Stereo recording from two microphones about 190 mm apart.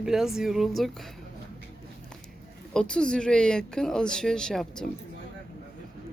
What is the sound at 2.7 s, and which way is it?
Speech, 5° left (ahead or behind).